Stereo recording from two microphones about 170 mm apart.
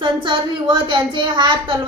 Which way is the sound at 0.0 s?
30° right (ahead or behind).